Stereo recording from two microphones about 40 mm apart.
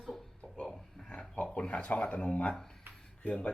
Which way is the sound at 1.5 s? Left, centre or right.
Left.